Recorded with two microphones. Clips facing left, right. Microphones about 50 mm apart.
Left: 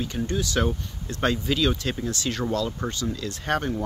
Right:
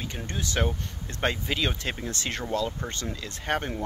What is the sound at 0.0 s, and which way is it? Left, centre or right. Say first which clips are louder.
Speech: left 7 dB; right.